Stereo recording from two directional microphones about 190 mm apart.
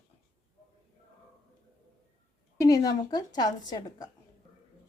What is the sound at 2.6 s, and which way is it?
A woman's voice, 15° left (ahead or behind).